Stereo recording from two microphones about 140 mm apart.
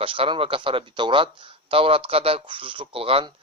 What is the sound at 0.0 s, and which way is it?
Speech, 40° right (ahead or behind).